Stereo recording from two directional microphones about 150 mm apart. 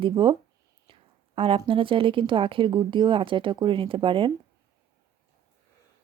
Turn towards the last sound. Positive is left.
turn(degrees=-35)  # may be behind; listen again after turning